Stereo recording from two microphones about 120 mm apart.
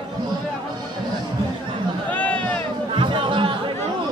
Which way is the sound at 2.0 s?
10° left (ahead or behind).